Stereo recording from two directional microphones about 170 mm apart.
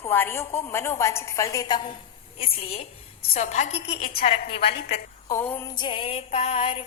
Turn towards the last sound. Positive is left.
turn(degrees=35)  # may be behind; listen again after turning